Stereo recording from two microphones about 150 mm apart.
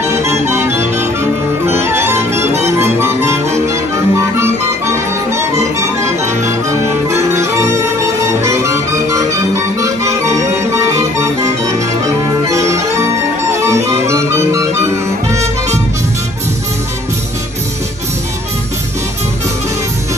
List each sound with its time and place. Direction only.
0.0 s music: 15° right (ahead or behind)